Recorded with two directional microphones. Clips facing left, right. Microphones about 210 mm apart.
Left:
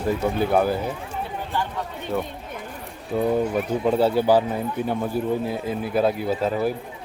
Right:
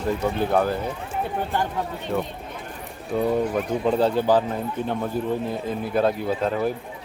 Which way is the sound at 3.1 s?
Centre (ahead or behind).